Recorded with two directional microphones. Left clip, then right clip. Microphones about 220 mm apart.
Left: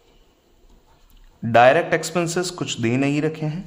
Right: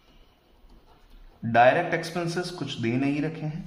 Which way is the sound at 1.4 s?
45° left (ahead or behind).